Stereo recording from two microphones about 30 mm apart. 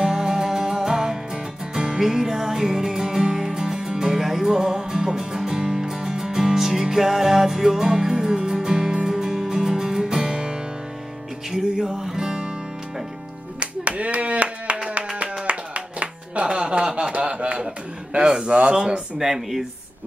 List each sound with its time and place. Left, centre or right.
0.0 s music: right
2.0 s music: centre
13.6 s clapping: right
15.4 s music: right
16.4 s a sound: right
18.4 s speech: right
19.1 s speech: centre